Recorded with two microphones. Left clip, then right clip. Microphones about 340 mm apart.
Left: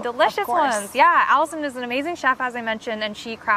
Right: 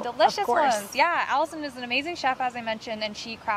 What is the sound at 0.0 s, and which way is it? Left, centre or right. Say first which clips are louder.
Speech: left 2 dB; left.